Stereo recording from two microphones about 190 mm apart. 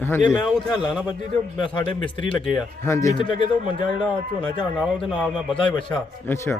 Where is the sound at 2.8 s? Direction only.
15° left (ahead or behind).